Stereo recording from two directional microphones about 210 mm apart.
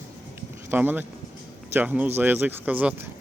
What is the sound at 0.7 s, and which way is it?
Speech, 10° right (ahead or behind).